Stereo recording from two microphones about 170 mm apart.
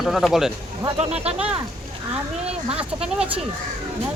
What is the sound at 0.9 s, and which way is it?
Speech, 40° right (ahead or behind).